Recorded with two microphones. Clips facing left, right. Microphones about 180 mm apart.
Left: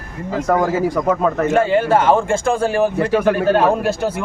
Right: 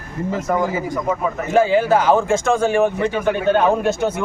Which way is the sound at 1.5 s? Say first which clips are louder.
Right 3 dB; centre (ahead or behind).